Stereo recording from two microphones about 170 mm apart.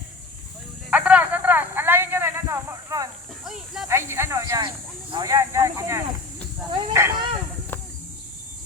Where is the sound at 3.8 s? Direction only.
15° right (ahead or behind).